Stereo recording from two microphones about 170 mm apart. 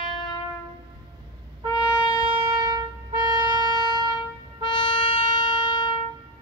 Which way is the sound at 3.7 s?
25° left (ahead or behind).